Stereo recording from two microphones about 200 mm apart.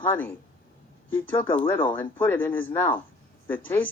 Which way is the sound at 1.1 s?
10° left (ahead or behind).